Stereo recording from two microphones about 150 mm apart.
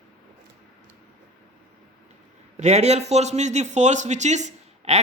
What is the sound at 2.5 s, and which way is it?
A man's voice, 45° right (ahead or behind).